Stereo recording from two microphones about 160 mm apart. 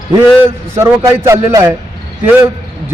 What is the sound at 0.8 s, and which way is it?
Speech, 15° right (ahead or behind).